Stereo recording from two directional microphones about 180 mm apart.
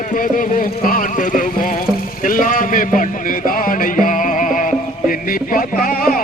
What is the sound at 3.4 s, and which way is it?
Music, 50° left (ahead or behind).